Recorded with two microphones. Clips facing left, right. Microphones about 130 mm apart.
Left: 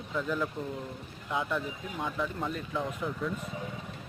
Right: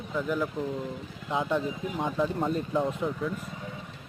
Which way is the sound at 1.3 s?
25° right (ahead or behind).